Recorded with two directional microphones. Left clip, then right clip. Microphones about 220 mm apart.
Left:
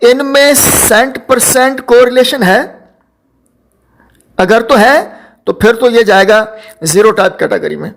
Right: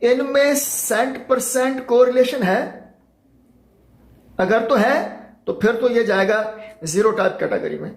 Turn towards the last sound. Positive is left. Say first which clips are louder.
# left 9 dB
turn(degrees=45)  # may be behind; listen again after turning